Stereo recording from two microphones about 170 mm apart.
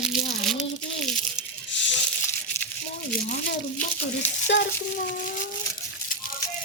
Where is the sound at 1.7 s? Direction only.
90° left.